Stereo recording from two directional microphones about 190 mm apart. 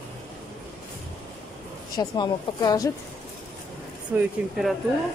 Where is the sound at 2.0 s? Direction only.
20° left (ahead or behind).